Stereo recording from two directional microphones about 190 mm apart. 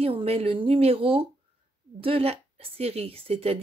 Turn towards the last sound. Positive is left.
turn(degrees=-30)  # may be behind; listen again after turning